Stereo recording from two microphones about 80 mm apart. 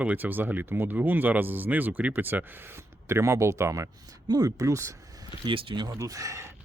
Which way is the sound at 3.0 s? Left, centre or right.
Right.